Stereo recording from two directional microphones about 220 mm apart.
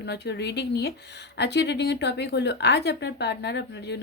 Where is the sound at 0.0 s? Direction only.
50° left (ahead or behind).